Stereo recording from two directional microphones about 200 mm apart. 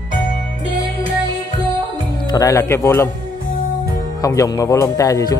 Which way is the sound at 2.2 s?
15° left (ahead or behind).